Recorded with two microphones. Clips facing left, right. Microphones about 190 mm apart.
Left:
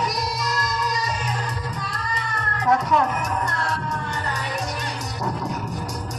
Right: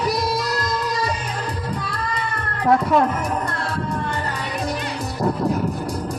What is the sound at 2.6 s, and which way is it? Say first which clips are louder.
Music: right 4 dB; 55° right (ahead or behind).